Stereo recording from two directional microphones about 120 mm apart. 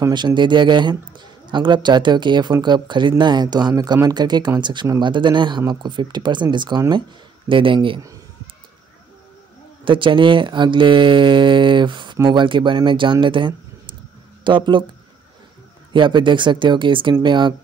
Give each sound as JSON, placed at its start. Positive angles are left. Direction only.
{"t": 0.1, "sound": "a man's voice", "side_deg": -40}
{"t": 9.8, "sound": "a man's voice", "side_deg": -45}
{"t": 15.9, "sound": "a man's voice", "side_deg": -40}